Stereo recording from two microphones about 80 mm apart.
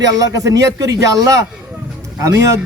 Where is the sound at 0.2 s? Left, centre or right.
Right.